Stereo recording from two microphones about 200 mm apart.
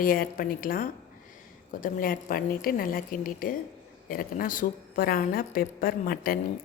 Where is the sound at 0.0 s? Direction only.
45° left (ahead or behind).